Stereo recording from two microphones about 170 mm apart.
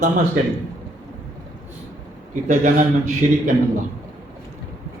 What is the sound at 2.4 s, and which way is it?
Speech, 50° right (ahead or behind).